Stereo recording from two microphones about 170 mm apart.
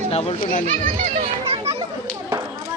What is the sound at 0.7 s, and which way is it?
Children playing, 40° right (ahead or behind).